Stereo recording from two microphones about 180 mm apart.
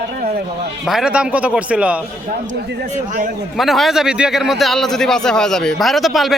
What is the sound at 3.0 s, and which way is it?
Speech, 45° right (ahead or behind).